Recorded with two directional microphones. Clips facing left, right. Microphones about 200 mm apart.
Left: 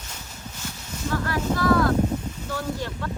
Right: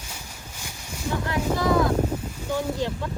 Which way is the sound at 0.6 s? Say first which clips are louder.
Left 2 dB; 10° right (ahead or behind).